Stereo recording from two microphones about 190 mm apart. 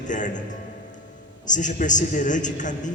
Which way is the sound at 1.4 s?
40° left (ahead or behind).